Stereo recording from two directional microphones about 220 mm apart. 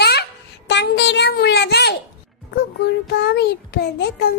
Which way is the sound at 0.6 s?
50° left (ahead or behind).